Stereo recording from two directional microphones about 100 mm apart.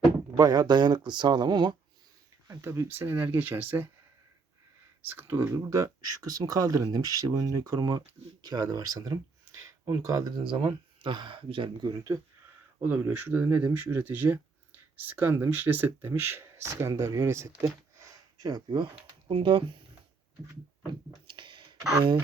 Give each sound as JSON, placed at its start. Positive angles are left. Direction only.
{"t": 0.3, "sound": "speech", "side_deg": -40}
{"t": 2.5, "sound": "speech", "side_deg": -25}
{"t": 5.0, "sound": "speech", "side_deg": -25}
{"t": 12.1, "sound": "speech", "side_deg": -35}
{"t": 12.8, "sound": "speech", "side_deg": -20}
{"t": 18.0, "sound": "a sound", "side_deg": -35}
{"t": 19.3, "sound": "speech", "side_deg": -60}
{"t": 21.2, "sound": "a sound", "side_deg": -55}